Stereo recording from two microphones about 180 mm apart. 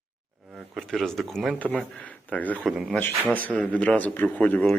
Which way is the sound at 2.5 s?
5° right (ahead or behind).